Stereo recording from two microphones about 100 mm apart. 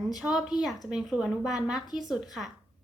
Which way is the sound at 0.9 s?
10° right (ahead or behind).